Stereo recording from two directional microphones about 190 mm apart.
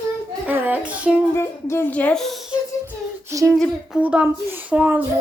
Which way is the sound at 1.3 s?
15° left (ahead or behind).